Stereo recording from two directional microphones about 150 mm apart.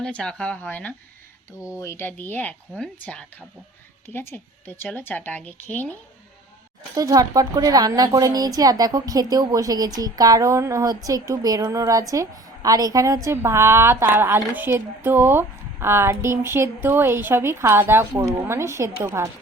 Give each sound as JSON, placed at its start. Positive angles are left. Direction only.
{"t": 0.0, "sound": "speech", "side_deg": 5}
{"t": 6.9, "sound": "a woman's voice", "side_deg": -25}